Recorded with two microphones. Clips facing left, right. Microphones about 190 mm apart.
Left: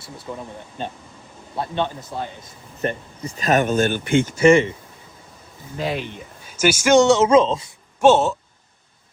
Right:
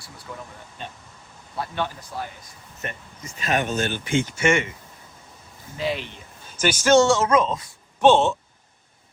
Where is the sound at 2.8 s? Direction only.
35° left (ahead or behind); by 4.3 s 60° left (ahead or behind).